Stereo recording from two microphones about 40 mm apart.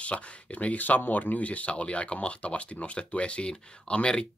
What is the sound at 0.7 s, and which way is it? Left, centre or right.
Speech, left.